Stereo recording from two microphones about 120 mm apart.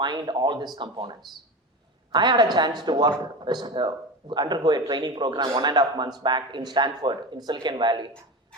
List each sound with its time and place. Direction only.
0.0 s speech: 40° right (ahead or behind)
2.1 s speech: 35° right (ahead or behind)